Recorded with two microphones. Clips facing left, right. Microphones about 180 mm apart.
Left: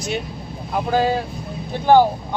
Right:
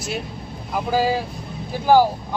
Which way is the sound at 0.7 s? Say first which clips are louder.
Left 1 dB; 5° right (ahead or behind).